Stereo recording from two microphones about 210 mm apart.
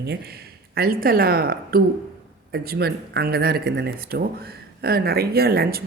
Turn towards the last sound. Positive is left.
turn(degrees=-45)  # may be behind; listen again after turning